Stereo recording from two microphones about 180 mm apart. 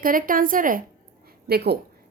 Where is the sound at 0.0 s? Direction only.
50° right (ahead or behind).